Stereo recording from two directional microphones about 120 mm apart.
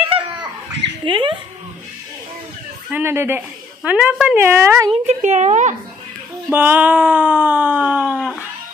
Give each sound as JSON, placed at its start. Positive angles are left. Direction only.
{"t": 0.1, "sound": "chicken", "side_deg": -40}
{"t": 1.0, "sound": "speech", "side_deg": -45}
{"t": 2.9, "sound": "a woman's voice", "side_deg": -20}
{"t": 4.4, "sound": "a woman's voice", "side_deg": -20}
{"t": 5.0, "sound": "a woman's voice", "side_deg": -80}
{"t": 6.5, "sound": "a sound", "side_deg": -15}